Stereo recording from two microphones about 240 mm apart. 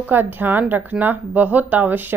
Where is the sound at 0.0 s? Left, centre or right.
Centre.